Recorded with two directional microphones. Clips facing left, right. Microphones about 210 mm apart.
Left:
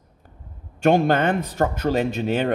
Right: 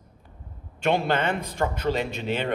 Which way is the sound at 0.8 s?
45° left (ahead or behind).